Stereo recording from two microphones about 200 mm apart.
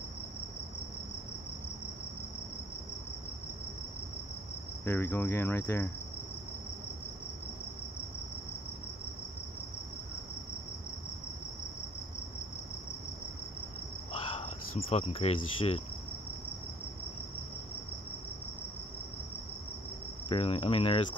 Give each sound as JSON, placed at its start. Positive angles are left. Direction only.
{"t": 4.8, "sound": "insect", "side_deg": 10}
{"t": 14.1, "sound": "speech", "side_deg": 25}
{"t": 20.2, "sound": "cricket", "side_deg": 30}